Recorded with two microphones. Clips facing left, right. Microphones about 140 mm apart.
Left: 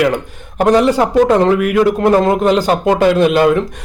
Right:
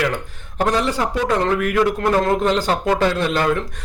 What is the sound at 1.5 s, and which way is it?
Speech, 15° left (ahead or behind).